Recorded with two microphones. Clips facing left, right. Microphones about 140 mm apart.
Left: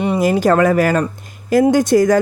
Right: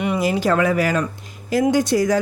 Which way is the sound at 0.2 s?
45° left (ahead or behind).